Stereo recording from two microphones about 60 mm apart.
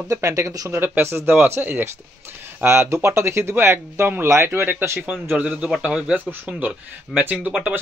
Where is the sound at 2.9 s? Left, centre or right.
Right.